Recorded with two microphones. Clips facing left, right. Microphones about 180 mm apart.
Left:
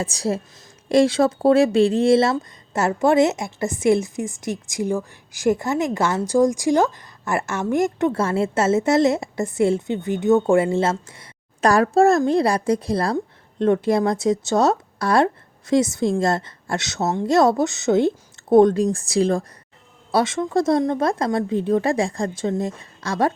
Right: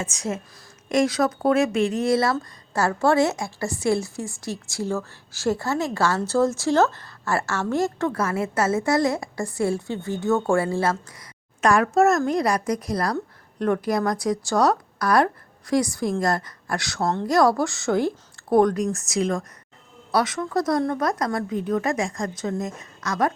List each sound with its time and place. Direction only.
0.0 s a woman's voice: 35° left (ahead or behind)